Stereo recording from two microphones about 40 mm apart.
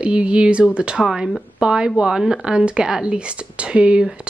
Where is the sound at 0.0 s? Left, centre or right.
Right.